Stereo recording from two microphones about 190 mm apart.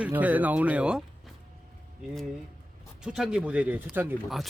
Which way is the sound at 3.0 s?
5° right (ahead or behind).